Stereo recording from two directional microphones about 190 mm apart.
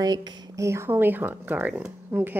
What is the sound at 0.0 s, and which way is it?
A woman's voice, 20° right (ahead or behind).